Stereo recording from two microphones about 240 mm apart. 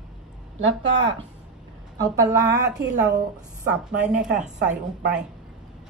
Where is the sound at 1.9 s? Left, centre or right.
Centre.